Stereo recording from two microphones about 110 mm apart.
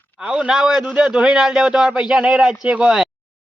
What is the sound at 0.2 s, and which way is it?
A man's voice, 10° right (ahead or behind).